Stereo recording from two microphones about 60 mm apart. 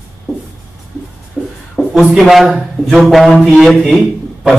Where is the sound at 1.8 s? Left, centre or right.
Centre.